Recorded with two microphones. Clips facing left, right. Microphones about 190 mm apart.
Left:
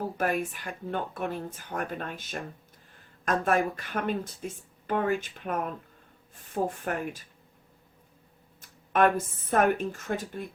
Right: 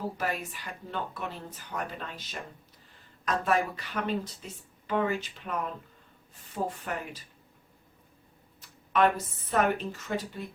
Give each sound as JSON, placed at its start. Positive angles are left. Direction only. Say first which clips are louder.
{"t": 0.2, "sound": "speech", "louder": "left 5 dB", "side_deg": 50}
{"t": 8.6, "sound": "speech", "louder": "left 2 dB", "side_deg": 50}